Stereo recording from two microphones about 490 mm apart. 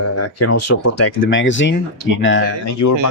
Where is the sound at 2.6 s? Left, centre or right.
Left.